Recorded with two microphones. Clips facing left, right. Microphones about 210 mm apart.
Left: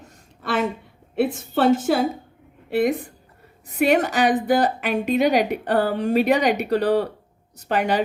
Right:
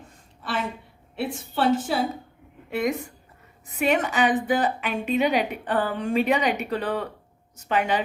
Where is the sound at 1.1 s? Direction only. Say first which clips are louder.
Left 7 dB; 45° left (ahead or behind).